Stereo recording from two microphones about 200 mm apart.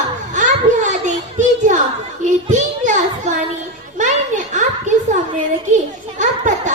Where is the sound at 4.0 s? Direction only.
40° right (ahead or behind).